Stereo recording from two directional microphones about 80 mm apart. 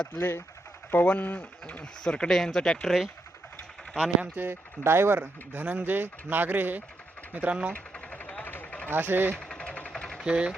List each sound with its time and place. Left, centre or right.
0.2 s speech: left; by 3.1 s centre
3.9 s speech: centre
4.4 s speech: right
7.7 s vehicle: centre
8.9 s speech: right
9.4 s vehicle: centre
9.9 s sewing machine: centre
10.2 s speech: centre